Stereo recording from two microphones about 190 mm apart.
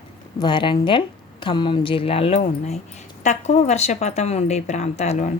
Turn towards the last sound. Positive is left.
turn(degrees=40)  # may be behind; listen again after turning